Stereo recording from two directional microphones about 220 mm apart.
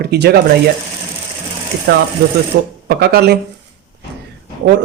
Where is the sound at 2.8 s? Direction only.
45° right (ahead or behind).